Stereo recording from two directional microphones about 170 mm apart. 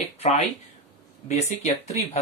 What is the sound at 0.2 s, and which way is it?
Speech, 40° left (ahead or behind).